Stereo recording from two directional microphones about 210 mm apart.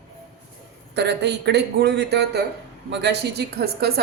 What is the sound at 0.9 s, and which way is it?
A man's voice, 55° right (ahead or behind).